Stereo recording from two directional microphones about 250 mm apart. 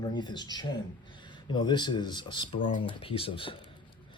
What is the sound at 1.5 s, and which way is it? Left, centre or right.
Speech, centre.